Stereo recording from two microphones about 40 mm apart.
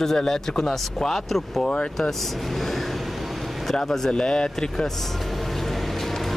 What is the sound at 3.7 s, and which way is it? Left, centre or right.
Speech, centre.